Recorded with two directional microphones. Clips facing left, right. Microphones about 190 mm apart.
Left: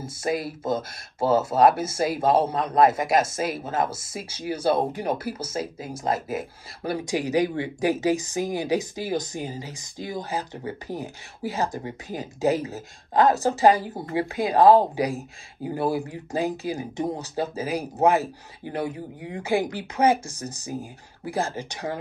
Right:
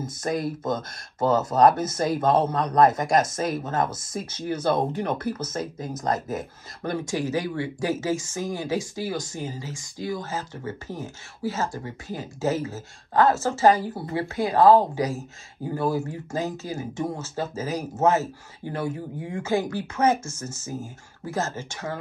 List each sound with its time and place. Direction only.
0.0 s speech: 10° left (ahead or behind)